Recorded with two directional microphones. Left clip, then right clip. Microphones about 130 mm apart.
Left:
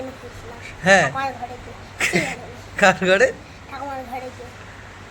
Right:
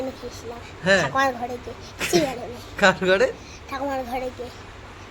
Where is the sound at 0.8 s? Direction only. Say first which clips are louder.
Left 3 dB; 5° left (ahead or behind).